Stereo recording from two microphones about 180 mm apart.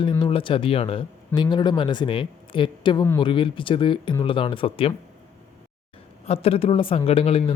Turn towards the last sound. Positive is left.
turn(degrees=30)  # may be behind; listen again after turning